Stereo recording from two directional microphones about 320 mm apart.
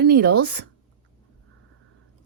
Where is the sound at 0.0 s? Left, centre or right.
Right.